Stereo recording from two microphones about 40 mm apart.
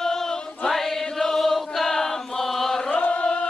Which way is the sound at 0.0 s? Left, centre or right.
Centre.